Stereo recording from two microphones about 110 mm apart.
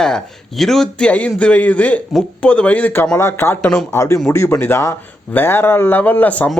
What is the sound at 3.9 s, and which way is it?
Speech, 25° left (ahead or behind).